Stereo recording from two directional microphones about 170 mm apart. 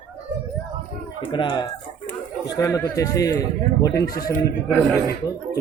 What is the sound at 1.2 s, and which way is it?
A man's voice, 30° left (ahead or behind).